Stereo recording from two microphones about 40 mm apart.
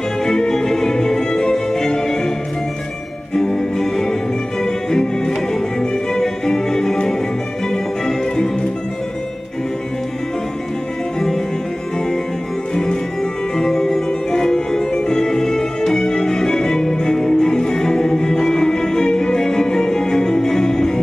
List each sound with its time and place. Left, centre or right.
0.2 s music: centre
3.3 s music: centre
11.1 s music: centre
12.7 s music: centre